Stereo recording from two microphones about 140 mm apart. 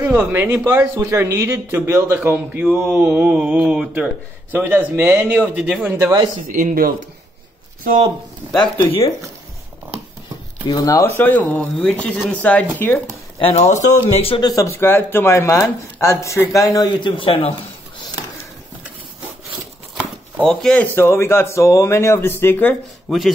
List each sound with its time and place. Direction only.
0.0 s a man's voice: 10° right (ahead or behind)
4.5 s a man's voice: 15° right (ahead or behind)
6.4 s speech: 75° right (ahead or behind)
8.5 s speech: 25° left (ahead or behind)
10.7 s a man's voice: 25° left (ahead or behind)
13.4 s speech: 45° left (ahead or behind)
14.4 s speech: 25° left (ahead or behind); by 18.0 s 40° left (ahead or behind)
20.4 s a man's voice: 5° left (ahead or behind)